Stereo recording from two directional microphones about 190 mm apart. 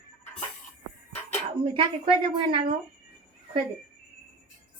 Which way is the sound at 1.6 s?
25° right (ahead or behind).